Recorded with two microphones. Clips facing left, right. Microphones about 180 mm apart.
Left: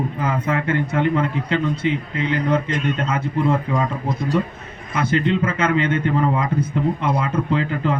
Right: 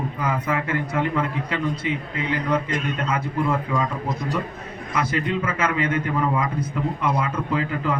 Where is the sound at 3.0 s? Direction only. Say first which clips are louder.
Left 3 dB; 25° left (ahead or behind).